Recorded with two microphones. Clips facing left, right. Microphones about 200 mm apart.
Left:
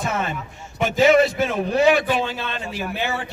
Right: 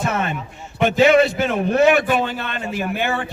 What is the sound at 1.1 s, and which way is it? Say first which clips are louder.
A man's voice: right 1 dB; 60° right (ahead or behind).